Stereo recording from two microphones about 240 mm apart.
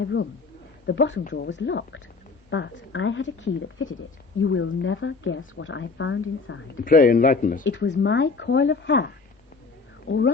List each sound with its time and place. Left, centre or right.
0.0 s speech: left
6.8 s a man's voice: left
7.6 s speech: left